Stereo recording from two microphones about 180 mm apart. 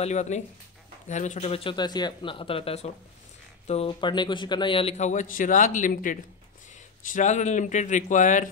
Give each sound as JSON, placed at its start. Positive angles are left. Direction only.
{"t": 0.0, "sound": "a man's voice", "side_deg": 40}